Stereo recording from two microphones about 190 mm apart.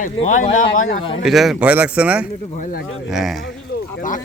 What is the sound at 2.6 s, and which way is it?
Speech, 45° left (ahead or behind).